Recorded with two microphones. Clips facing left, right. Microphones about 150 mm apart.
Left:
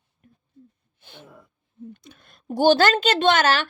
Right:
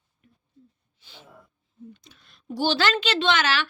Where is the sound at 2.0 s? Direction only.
50° left (ahead or behind).